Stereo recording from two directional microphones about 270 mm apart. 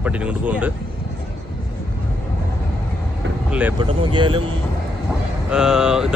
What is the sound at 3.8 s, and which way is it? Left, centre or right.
Speech, centre.